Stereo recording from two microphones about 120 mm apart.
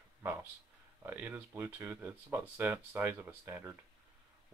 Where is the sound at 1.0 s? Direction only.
15° right (ahead or behind).